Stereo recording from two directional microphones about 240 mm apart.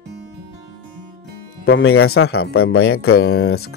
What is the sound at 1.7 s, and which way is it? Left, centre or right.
Speech, left.